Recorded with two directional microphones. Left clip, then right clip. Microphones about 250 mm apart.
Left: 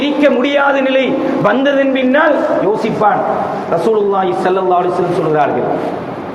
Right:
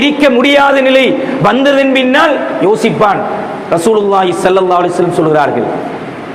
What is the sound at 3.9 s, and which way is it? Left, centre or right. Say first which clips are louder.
Speech: right 4 dB; right.